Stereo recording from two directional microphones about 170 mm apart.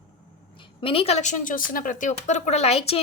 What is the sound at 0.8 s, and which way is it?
A woman's voice, 30° left (ahead or behind).